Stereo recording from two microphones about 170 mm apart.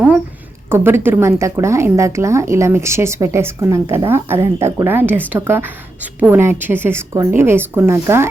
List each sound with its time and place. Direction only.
0.7 s a woman's voice: 15° right (ahead or behind)